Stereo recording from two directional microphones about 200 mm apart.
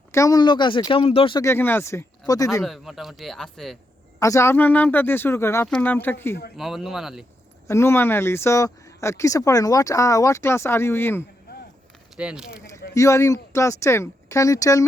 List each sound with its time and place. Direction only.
0.1 s speech: 15° left (ahead or behind)
1.4 s speech: 10° left (ahead or behind)
2.6 s speech: centre (ahead or behind)
4.2 s speech: 15° left (ahead or behind)
6.6 s speech: centre (ahead or behind)
7.7 s speech: 10° left (ahead or behind)
12.1 s speech: 5° right (ahead or behind)
12.9 s speech: 15° left (ahead or behind)